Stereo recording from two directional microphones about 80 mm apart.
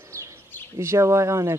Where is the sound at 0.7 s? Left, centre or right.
Right.